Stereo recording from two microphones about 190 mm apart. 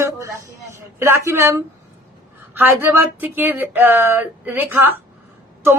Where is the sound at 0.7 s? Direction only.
10° right (ahead or behind).